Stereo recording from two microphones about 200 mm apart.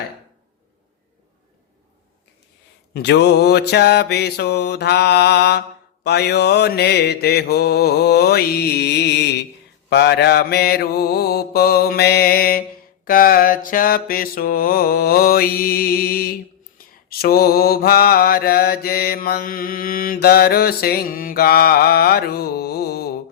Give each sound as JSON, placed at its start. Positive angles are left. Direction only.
{"t": 2.9, "sound": "mantra", "side_deg": 55}